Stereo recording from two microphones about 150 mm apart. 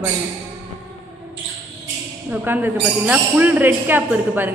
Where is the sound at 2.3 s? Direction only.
10° right (ahead or behind).